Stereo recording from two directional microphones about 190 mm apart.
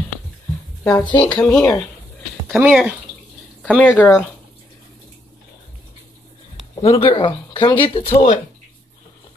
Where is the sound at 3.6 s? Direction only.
5° left (ahead or behind).